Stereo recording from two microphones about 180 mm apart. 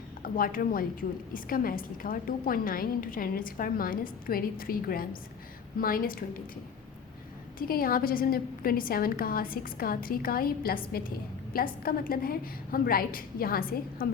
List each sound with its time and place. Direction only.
0.3 s a woman's voice: 50° left (ahead or behind)
7.7 s a woman's voice: 55° left (ahead or behind)